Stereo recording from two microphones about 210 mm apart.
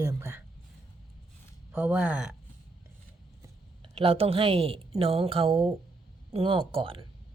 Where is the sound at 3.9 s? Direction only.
25° right (ahead or behind).